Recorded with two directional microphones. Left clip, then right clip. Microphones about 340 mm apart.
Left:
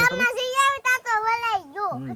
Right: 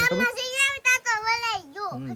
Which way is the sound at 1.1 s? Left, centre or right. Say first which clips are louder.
Left 3 dB; centre.